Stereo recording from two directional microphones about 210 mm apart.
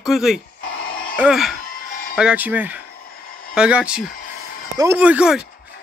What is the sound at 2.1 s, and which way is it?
Speech, 5° right (ahead or behind).